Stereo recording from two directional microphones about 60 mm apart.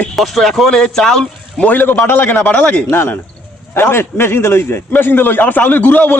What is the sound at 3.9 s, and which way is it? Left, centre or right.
A man's voice, left.